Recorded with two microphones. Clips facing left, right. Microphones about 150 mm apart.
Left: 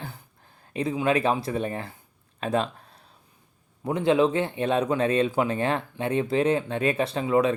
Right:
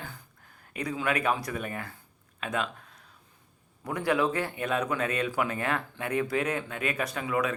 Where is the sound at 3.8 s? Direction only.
25° left (ahead or behind).